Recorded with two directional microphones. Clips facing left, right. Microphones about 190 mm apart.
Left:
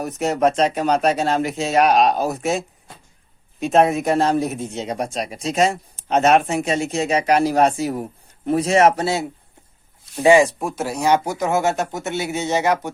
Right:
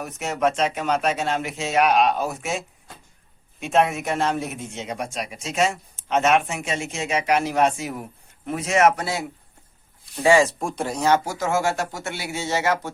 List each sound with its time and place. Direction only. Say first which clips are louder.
0.0 s speech: left 5 dB; 35° left (ahead or behind)
10.2 s speech: left 4 dB; 15° left (ahead or behind)
10.6 s speech: left 2 dB; 5° left (ahead or behind)